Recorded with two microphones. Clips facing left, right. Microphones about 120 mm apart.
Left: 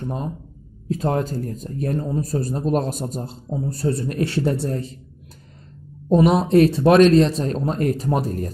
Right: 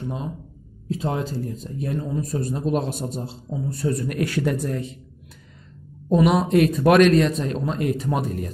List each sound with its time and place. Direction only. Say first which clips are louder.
0.0 s speech: left 2 dB; 50° left (ahead or behind)
6.0 s speech: left 2 dB; 30° left (ahead or behind)